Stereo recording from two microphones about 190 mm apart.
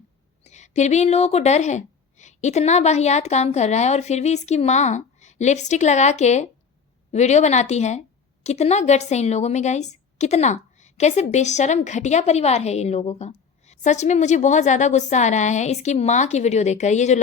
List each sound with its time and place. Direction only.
0.4 s a woman's voice: 35° left (ahead or behind)